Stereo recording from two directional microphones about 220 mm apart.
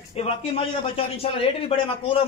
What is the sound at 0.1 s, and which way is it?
Speech, 25° left (ahead or behind).